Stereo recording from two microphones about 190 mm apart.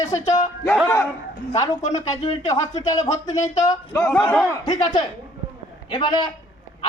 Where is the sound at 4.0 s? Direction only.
5° left (ahead or behind).